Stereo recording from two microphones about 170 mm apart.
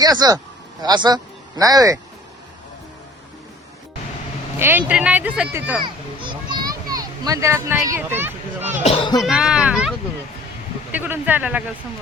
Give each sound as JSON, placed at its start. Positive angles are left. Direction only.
{"t": 0.0, "sound": "speech", "side_deg": -25}
{"t": 4.6, "sound": "speech", "side_deg": -10}
{"t": 5.8, "sound": "a sound", "side_deg": -25}
{"t": 7.9, "sound": "speech", "side_deg": -10}
{"t": 8.8, "sound": "speech", "side_deg": 35}
{"t": 9.2, "sound": "speech", "side_deg": -5}
{"t": 10.9, "sound": "speech", "side_deg": -10}